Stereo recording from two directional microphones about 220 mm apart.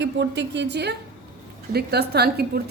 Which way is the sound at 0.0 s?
55° right (ahead or behind).